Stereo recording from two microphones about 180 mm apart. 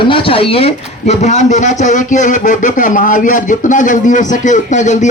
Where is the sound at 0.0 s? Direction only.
30° left (ahead or behind).